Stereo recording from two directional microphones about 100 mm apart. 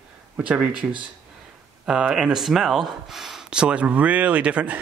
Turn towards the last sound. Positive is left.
turn(degrees=-15)  # may be behind; listen again after turning